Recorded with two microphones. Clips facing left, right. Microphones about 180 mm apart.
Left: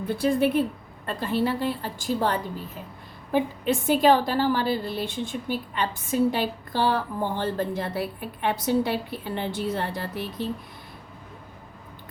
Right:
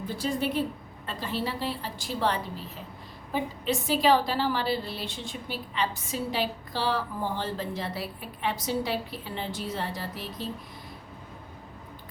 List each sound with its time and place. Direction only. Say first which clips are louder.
0.2 s a woman's voice: left 6 dB; 55° left (ahead or behind)